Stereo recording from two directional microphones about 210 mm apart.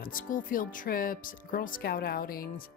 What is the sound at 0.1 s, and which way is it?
Speech, 40° left (ahead or behind).